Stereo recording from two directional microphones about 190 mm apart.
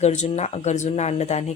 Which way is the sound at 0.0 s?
35° left (ahead or behind).